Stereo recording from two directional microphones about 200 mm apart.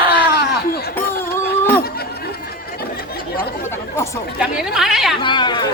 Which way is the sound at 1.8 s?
50° left (ahead or behind).